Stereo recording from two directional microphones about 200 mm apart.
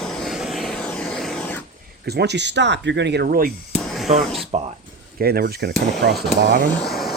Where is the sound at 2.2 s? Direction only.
60° right (ahead or behind).